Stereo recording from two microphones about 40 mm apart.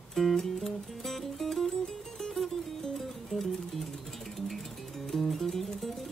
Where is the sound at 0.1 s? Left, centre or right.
Centre.